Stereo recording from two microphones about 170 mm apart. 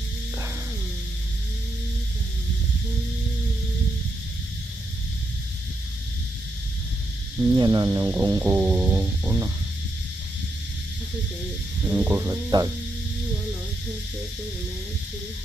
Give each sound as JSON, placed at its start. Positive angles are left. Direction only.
{"t": 7.5, "sound": "speech", "side_deg": -20}
{"t": 11.9, "sound": "speech", "side_deg": -10}